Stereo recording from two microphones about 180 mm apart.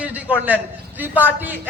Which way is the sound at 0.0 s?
10° right (ahead or behind).